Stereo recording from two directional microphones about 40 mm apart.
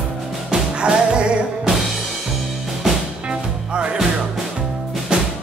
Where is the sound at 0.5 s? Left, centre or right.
Right.